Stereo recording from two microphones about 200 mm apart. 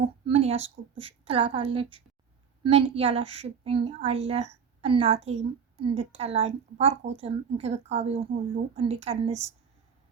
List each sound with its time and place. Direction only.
0.3 s a woman's voice: 30° right (ahead or behind)